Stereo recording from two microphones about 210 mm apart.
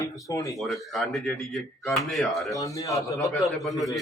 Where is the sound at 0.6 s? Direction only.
Centre (ahead or behind).